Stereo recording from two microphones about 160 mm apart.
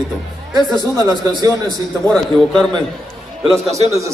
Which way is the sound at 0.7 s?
25° left (ahead or behind).